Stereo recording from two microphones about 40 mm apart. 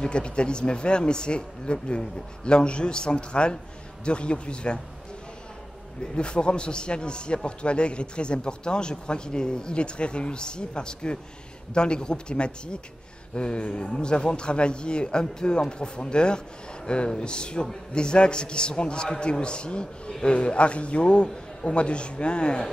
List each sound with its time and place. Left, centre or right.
0.0 s a man's voice: left
6.1 s a man's voice: left